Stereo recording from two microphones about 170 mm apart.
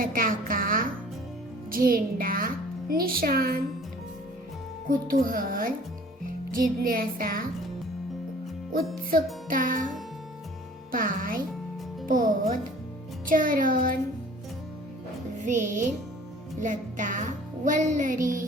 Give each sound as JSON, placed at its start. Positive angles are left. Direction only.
{"t": 0.0, "sound": "a sound", "side_deg": -55}
{"t": 1.7, "sound": "music", "side_deg": -60}
{"t": 4.9, "sound": "music", "side_deg": -55}
{"t": 9.5, "sound": "speech", "side_deg": -55}
{"t": 10.9, "sound": "music", "side_deg": -55}
{"t": 15.4, "sound": "speech", "side_deg": -45}